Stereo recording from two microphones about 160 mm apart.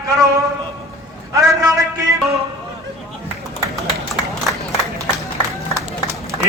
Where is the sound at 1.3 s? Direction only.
20° right (ahead or behind).